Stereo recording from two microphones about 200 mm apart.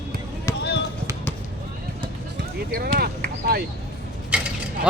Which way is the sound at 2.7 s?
50° right (ahead or behind).